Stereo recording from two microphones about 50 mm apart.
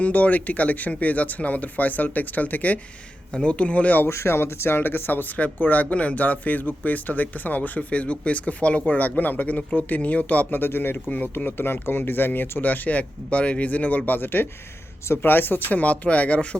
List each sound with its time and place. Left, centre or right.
0.0 s speech: left
4.0 s speech: left
5.4 s speech: left
10.6 s speech: left
11.1 s speech: left